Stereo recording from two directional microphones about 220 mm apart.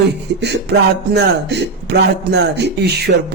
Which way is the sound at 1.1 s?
50° right (ahead or behind).